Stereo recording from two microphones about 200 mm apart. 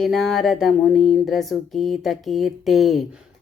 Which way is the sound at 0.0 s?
Centre (ahead or behind).